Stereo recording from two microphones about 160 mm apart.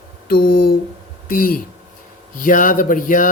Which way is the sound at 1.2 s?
65° left (ahead or behind).